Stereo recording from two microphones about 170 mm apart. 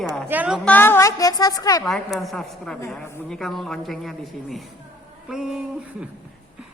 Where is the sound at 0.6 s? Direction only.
10° left (ahead or behind).